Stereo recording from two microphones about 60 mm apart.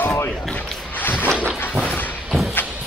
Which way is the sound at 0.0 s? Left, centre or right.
Left.